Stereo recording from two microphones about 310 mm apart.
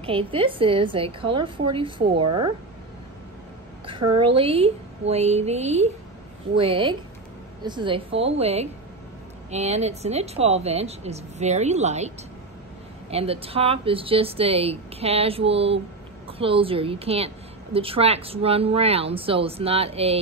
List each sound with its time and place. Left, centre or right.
0.0 s a woman's voice: centre
3.8 s a woman's voice: centre
13.1 s a woman's voice: centre